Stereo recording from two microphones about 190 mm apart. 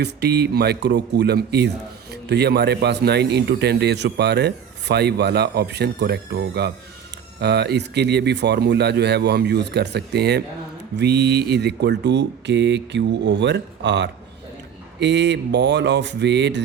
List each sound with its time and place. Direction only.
0.0 s a man's voice: 60° right (ahead or behind)